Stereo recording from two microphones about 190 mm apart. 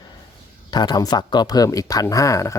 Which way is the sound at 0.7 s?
20° left (ahead or behind).